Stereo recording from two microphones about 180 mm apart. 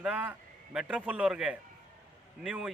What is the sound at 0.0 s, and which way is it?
A man's voice, 5° right (ahead or behind).